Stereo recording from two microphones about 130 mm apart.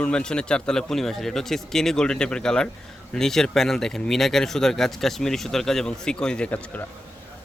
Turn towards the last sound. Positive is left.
turn(degrees=10)  # may be behind; listen again after turning